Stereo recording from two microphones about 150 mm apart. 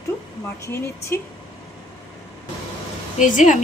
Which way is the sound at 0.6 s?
15° left (ahead or behind).